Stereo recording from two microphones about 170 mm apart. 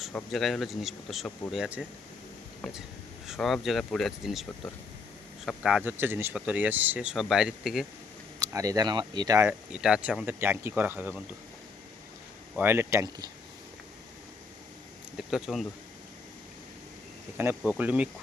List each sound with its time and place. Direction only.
0.0 s speech: 5° left (ahead or behind)
3.2 s speech: centre (ahead or behind)
8.4 s speech: 20° right (ahead or behind)
9.7 s speech: 5° right (ahead or behind)
12.5 s speech: 15° right (ahead or behind)
15.3 s speech: centre (ahead or behind)
17.3 s speech: 15° right (ahead or behind)